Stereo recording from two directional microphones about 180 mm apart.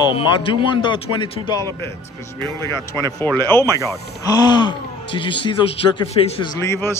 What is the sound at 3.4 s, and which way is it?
Speech, 15° left (ahead or behind).